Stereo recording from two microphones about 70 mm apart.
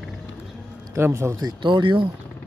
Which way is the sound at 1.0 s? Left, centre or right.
Right.